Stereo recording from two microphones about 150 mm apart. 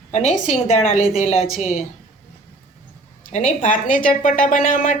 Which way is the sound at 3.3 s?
55° left (ahead or behind).